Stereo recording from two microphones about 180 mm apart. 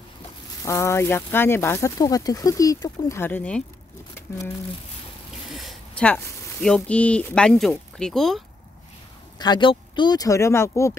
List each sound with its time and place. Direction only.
0.7 s speech: 15° left (ahead or behind)
5.5 s speech: centre (ahead or behind)
9.4 s speech: 25° left (ahead or behind)